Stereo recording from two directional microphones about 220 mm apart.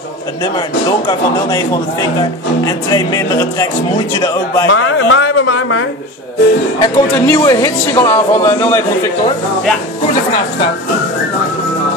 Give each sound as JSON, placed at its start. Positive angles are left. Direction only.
{"t": 0.8, "sound": "speech", "side_deg": 15}
{"t": 4.6, "sound": "speech", "side_deg": 60}
{"t": 6.8, "sound": "speech", "side_deg": 15}